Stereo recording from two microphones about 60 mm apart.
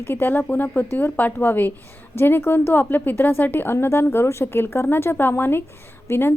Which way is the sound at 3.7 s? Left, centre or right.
Left.